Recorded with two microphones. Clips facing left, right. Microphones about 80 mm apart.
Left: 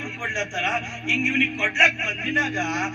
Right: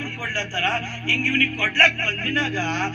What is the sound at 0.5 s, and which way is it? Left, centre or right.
Music, right.